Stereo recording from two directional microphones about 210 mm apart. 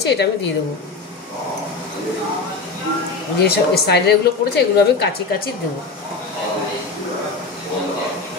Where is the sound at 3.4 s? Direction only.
50° left (ahead or behind).